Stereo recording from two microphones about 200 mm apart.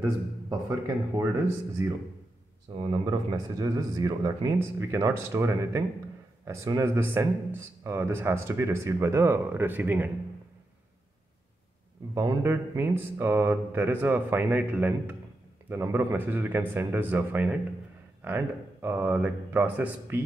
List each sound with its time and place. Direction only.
0.5 s speech: 15° right (ahead or behind)
12.1 s speech: 15° right (ahead or behind)